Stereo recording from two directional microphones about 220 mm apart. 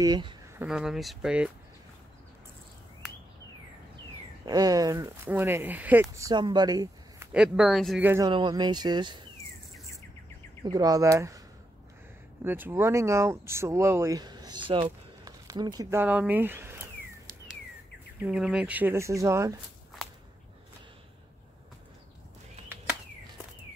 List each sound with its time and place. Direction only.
0.0 s speech: 20° right (ahead or behind)
0.6 s speech: 5° right (ahead or behind)
4.5 s speech: 15° right (ahead or behind)
7.3 s speech: 5° right (ahead or behind)
8.3 s speech: 20° right (ahead or behind)
10.6 s speech: 15° right (ahead or behind)
12.4 s speech: 10° right (ahead or behind)
18.2 s speech: 5° right (ahead or behind)